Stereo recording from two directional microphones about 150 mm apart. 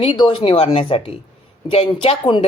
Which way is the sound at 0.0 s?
35° left (ahead or behind).